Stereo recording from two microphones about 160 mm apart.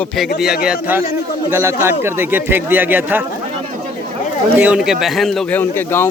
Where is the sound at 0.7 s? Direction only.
10° right (ahead or behind).